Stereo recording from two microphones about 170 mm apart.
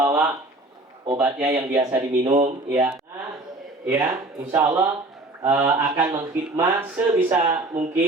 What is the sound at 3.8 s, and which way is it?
Speech, 10° right (ahead or behind).